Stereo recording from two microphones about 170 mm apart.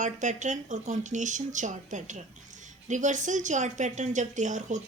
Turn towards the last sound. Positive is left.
turn(degrees=-45)  # may be behind; listen again after turning